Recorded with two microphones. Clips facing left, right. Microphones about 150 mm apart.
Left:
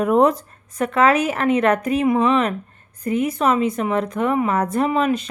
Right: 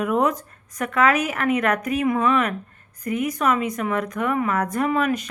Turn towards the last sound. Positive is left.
turn(degrees=25)  # may be behind; listen again after turning